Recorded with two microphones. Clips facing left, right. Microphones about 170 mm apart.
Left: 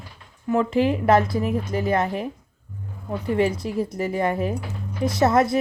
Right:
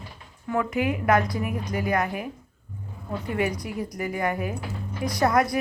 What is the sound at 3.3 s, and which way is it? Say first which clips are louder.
Speech: left 5 dB; 25° left (ahead or behind).